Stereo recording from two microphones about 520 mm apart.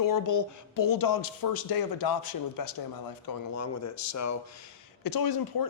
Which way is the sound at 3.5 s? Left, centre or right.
Left.